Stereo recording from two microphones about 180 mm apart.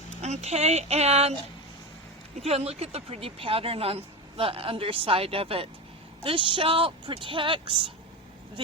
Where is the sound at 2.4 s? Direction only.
35° right (ahead or behind).